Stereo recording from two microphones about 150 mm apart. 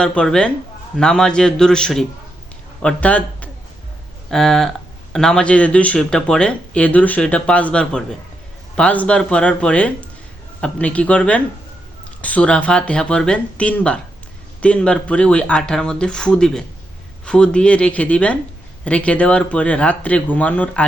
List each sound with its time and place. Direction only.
0.0 s a man's voice: 5° left (ahead or behind)